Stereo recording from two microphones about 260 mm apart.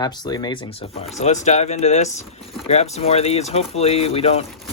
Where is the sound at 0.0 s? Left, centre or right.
Centre.